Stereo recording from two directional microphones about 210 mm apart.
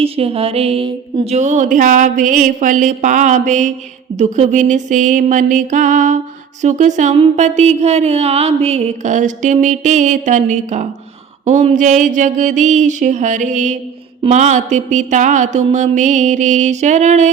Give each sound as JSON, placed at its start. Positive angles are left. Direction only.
{"t": 0.0, "sound": "speech", "side_deg": -25}